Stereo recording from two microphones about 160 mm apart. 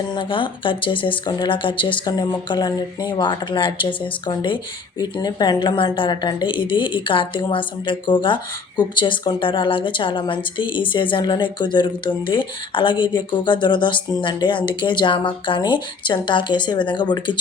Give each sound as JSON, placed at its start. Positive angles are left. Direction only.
{"t": 0.1, "sound": "speech", "side_deg": 30}